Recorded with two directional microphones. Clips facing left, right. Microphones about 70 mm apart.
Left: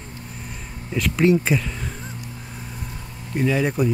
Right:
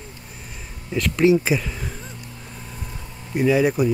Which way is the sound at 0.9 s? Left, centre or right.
Centre.